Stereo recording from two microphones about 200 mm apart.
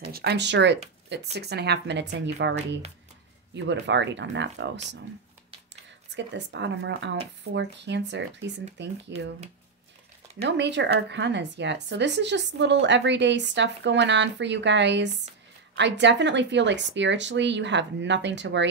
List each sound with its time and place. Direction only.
0.1 s speech: 55° right (ahead or behind)
3.5 s speech: 60° right (ahead or behind)
6.1 s speech: 60° right (ahead or behind)
10.4 s speech: 60° right (ahead or behind)